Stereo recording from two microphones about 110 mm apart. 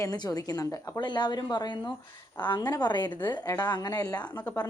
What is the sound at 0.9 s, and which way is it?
A woman's voice, 45° left (ahead or behind).